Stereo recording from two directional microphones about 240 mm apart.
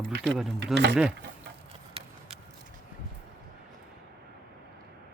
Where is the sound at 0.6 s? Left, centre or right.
Right.